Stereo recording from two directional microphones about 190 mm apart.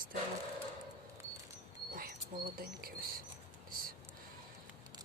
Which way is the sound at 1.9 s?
50° right (ahead or behind).